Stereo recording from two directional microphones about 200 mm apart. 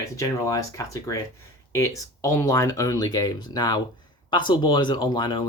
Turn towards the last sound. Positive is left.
turn(degrees=25)  # may be behind; listen again after turning